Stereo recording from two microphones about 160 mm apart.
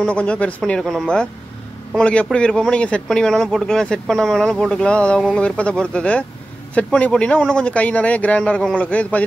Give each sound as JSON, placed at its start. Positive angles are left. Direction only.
{"t": 0.0, "sound": "speech", "side_deg": 5}